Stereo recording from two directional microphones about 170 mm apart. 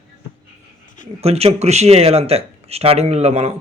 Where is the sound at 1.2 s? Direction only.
35° right (ahead or behind).